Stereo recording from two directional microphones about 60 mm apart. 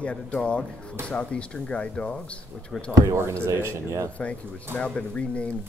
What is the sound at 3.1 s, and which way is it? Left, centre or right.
Speech, right.